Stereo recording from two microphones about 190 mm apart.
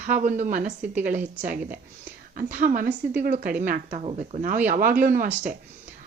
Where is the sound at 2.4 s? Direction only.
45° right (ahead or behind).